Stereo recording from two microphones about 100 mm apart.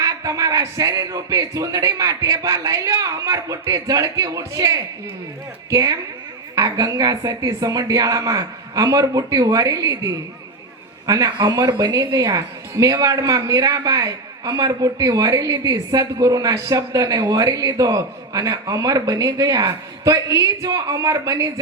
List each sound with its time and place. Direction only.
0.0 s a woman's voice: 35° right (ahead or behind)